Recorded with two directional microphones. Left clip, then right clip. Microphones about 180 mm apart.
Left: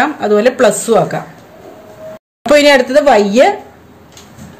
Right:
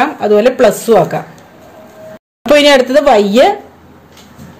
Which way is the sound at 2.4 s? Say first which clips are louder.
Right 1 dB; 20° right (ahead or behind).